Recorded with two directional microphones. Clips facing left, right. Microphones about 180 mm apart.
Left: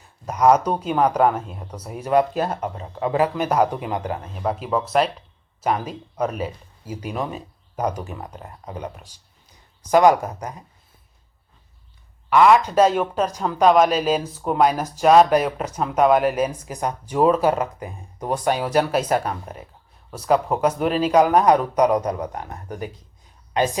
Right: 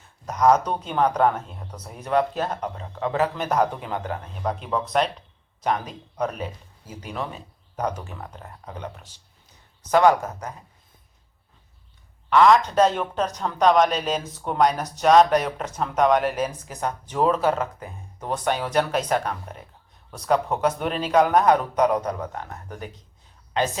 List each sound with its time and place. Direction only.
0.3 s speech: 10° left (ahead or behind)
12.3 s speech: 10° left (ahead or behind)